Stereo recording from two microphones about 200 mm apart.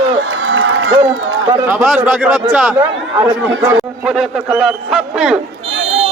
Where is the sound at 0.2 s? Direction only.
60° right (ahead or behind); by 0.9 s 90° right.